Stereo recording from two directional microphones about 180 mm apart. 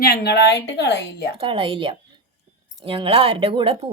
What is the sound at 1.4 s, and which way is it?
A woman's voice, 30° right (ahead or behind).